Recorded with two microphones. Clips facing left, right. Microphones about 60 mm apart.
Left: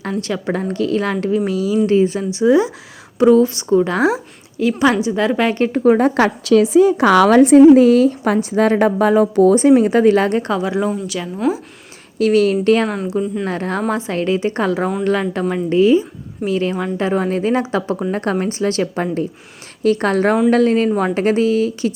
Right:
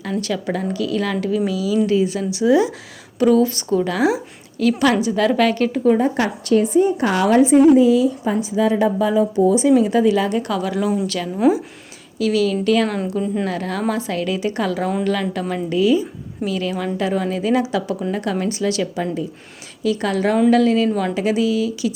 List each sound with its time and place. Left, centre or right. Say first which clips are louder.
0.0 s speech: left 1 dB; left
4.6 s a woman's voice: left 1 dB; left
5.7 s speech: left 6 dB; left
6.0 s a woman's voice: left 4 dB; left
10.6 s a woman's voice: left 1 dB; left
12.2 s a woman's voice: left 4 dB; left
12.9 s a woman's voice: left 1 dB; centre
13.5 s a woman's voice: left 2 dB; left